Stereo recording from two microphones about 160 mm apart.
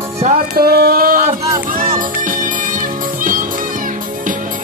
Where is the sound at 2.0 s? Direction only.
55° right (ahead or behind).